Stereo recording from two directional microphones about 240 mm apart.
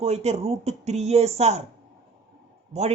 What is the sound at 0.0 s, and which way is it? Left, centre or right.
Speech, right.